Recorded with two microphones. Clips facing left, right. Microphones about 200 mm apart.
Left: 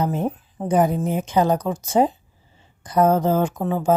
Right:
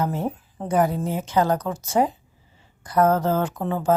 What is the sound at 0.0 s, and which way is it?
A woman's voice, 15° left (ahead or behind).